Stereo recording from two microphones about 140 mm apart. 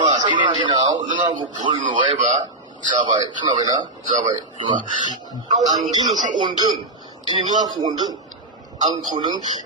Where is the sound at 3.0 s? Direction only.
35° right (ahead or behind).